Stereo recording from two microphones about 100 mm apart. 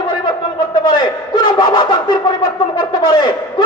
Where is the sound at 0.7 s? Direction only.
45° left (ahead or behind).